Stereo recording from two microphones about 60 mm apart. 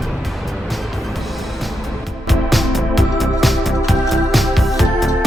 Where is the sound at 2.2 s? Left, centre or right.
Centre.